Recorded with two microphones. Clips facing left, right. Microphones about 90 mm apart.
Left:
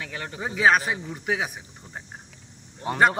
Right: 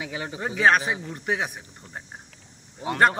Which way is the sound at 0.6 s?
Centre (ahead or behind).